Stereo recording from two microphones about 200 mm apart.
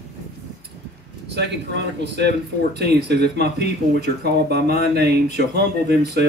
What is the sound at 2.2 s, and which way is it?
Speech, 55° right (ahead or behind).